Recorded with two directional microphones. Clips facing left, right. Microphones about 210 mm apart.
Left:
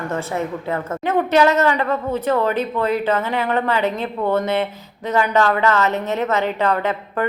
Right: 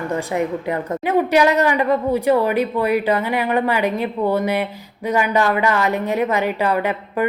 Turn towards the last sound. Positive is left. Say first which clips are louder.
# right 1 dB
turn(degrees=-10)  # may be behind; listen again after turning